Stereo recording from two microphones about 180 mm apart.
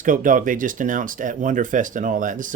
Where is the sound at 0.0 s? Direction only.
45° right (ahead or behind).